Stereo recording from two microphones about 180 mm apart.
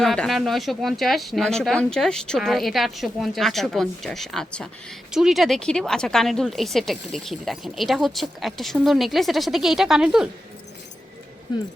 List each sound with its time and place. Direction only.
0.0 s speech: centre (ahead or behind)
11.5 s speech: 25° left (ahead or behind)